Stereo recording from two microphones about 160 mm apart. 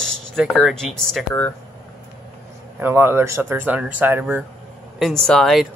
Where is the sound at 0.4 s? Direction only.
Centre (ahead or behind).